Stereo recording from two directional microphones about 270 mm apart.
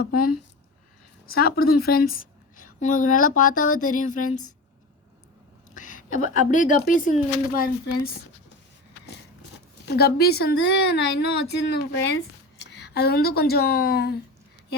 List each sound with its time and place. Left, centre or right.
0.0 s a woman's voice: left
5.7 s a sound: left
6.2 s speech: left
9.8 s a woman's voice: left